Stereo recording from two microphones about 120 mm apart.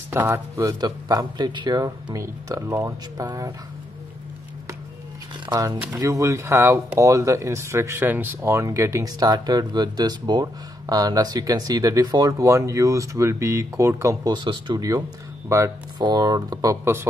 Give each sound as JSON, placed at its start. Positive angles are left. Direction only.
{"t": 0.1, "sound": "speech", "side_deg": -20}
{"t": 5.5, "sound": "speech", "side_deg": -35}
{"t": 14.3, "sound": "speech", "side_deg": -40}